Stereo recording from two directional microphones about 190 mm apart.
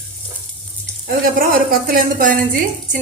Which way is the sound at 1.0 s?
50° right (ahead or behind).